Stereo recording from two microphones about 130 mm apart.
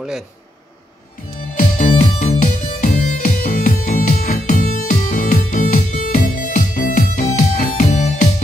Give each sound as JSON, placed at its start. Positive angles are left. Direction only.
{"t": 1.6, "sound": "music", "side_deg": 90}
{"t": 2.2, "sound": "music", "side_deg": 75}